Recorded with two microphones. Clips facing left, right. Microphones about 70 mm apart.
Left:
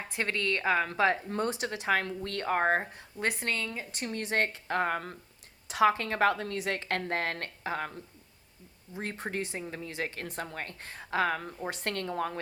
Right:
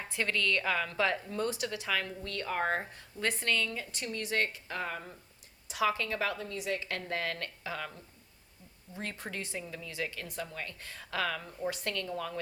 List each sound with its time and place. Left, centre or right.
0.1 s a woman's voice: left
3.2 s a woman's voice: left
4.0 s a woman's voice: left
9.0 s a woman's voice: left